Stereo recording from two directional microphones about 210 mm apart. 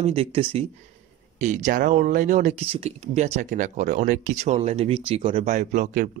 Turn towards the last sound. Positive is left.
turn(degrees=-35)  # may be behind; listen again after turning